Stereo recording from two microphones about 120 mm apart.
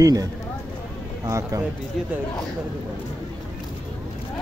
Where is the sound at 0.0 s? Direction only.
30° right (ahead or behind).